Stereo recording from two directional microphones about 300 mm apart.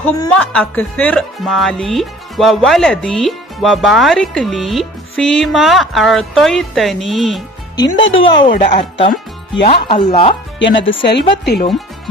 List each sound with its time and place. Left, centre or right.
0.0 s speech: centre
7.9 s speech: left
8.4 s speech: left
10.6 s speech: left